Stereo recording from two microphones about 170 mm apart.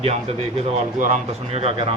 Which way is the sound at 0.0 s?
35° right (ahead or behind).